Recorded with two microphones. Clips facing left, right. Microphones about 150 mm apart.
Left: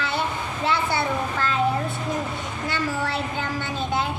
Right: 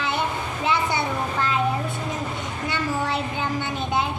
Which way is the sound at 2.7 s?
20° right (ahead or behind).